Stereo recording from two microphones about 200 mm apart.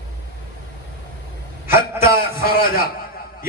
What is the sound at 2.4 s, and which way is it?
Speech, 50° left (ahead or behind).